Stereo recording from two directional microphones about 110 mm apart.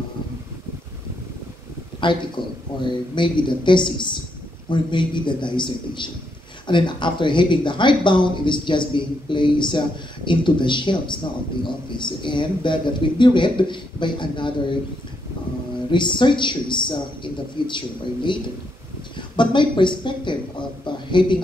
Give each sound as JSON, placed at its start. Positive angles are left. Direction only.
{"t": 2.0, "sound": "speech", "side_deg": 45}
{"t": 15.9, "sound": "speech", "side_deg": 45}